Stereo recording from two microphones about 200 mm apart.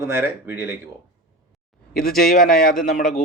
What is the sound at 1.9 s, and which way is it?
A man's voice, 50° left (ahead or behind).